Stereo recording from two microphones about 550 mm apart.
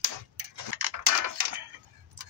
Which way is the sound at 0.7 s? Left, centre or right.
Right.